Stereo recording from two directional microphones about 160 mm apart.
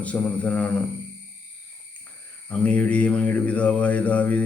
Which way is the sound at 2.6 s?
10° left (ahead or behind).